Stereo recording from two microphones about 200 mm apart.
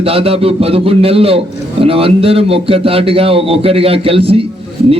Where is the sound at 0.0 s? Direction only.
30° right (ahead or behind).